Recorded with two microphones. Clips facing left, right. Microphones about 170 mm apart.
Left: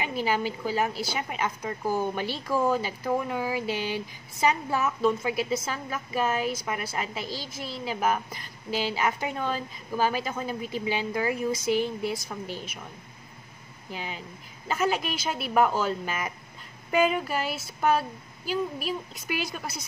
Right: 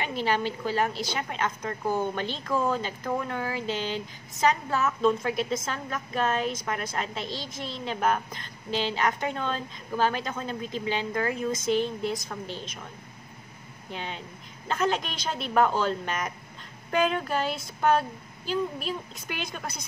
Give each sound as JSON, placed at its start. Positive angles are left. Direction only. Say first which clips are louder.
{"t": 0.0, "sound": "a woman's voice", "louder": "even", "side_deg": 10}
{"t": 13.8, "sound": "a woman's voice", "louder": "even", "side_deg": 5}